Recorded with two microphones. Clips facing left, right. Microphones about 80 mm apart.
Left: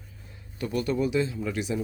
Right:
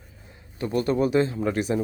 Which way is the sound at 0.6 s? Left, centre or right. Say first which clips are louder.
Right 4 dB; right.